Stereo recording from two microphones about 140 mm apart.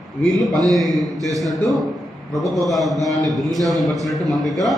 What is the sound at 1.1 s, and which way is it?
Speech, 25° right (ahead or behind).